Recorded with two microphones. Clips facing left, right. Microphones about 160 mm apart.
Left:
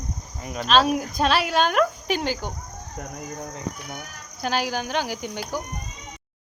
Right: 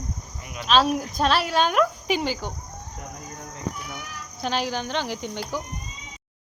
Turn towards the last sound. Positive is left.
turn(degrees=5)  # may be behind; listen again after turning